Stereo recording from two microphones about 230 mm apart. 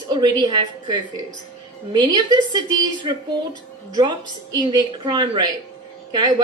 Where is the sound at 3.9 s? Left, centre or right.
Centre.